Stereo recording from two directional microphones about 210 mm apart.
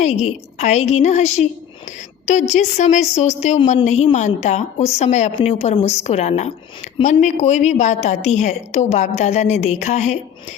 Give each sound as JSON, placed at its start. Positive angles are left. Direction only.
{"t": 0.0, "sound": "a woman's voice", "side_deg": 30}